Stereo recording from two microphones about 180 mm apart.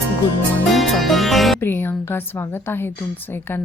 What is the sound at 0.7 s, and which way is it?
Music, centre (ahead or behind).